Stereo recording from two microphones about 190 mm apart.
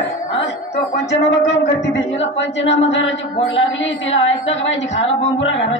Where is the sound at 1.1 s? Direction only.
70° left (ahead or behind).